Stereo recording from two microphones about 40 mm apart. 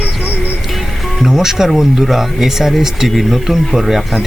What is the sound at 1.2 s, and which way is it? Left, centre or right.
Speech, centre.